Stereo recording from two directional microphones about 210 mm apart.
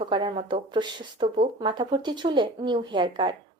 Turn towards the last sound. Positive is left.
turn(degrees=-20)  # may be behind; listen again after turning